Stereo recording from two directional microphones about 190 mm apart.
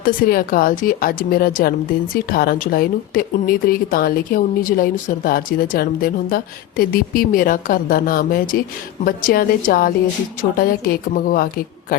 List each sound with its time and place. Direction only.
0.0 s speech: 50° left (ahead or behind)